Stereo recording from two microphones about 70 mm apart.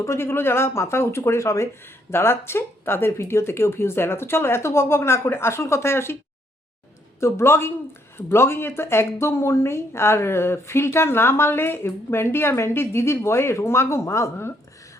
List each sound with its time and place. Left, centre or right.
0.0 s speech: left
2.0 s speech: left
7.2 s speech: left